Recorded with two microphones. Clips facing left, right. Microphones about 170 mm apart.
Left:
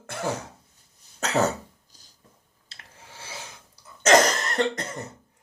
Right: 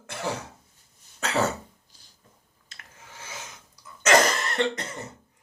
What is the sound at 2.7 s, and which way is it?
Rub, 30° left (ahead or behind).